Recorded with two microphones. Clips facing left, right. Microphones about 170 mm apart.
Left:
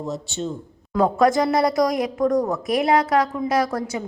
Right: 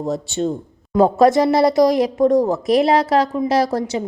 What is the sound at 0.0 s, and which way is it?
Speech, 55° right (ahead or behind).